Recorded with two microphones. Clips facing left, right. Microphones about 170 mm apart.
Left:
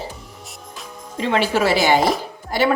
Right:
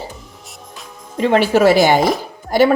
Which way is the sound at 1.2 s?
50° right (ahead or behind).